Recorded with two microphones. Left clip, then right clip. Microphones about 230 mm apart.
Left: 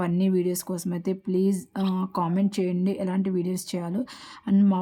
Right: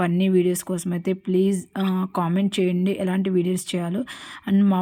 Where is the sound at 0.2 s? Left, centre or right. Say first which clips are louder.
Right 5 dB; centre.